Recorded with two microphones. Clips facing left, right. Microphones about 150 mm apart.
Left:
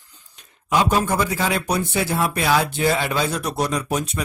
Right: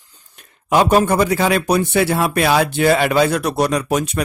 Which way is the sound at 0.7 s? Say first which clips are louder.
Right 5 dB; 65° right (ahead or behind).